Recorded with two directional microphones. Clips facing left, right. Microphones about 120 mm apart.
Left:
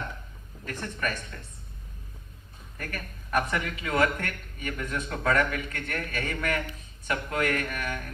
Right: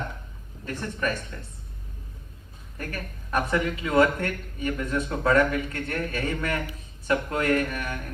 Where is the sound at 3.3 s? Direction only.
25° right (ahead or behind).